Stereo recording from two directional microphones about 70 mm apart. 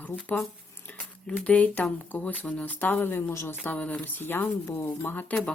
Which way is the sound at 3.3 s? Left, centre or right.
Left.